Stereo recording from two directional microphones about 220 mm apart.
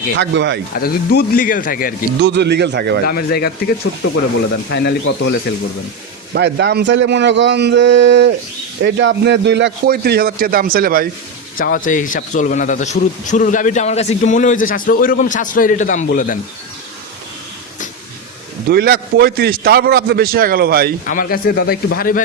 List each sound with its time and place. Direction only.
0.2 s a man's voice: 55° right (ahead or behind)
0.8 s a man's voice: 45° left (ahead or behind)
2.2 s a man's voice: 50° right (ahead or behind)
3.1 s speech: 45° left (ahead or behind)
6.3 s a man's voice: 50° right (ahead or behind)
11.5 s a man's voice: 40° left (ahead or behind)
18.7 s a man's voice: 45° right (ahead or behind)
21.0 s a man's voice: 40° left (ahead or behind)